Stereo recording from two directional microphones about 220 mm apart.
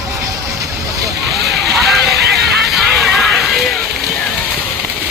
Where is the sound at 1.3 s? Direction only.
50° right (ahead or behind).